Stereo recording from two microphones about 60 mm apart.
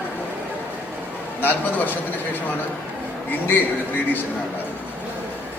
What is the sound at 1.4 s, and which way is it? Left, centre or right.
Speech, left.